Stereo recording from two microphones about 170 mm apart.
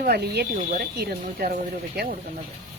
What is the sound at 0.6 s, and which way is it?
Speech, 55° right (ahead or behind).